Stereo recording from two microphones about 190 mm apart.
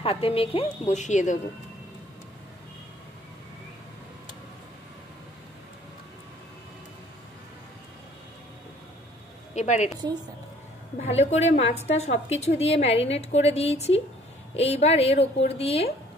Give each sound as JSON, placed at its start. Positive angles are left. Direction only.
{"t": 0.0, "sound": "a woman's voice", "side_deg": 30}
{"t": 9.6, "sound": "a woman's voice", "side_deg": 35}
{"t": 11.0, "sound": "a woman's voice", "side_deg": 35}